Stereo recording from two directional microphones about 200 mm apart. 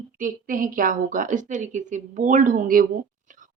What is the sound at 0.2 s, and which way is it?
A woman's voice, 45° right (ahead or behind).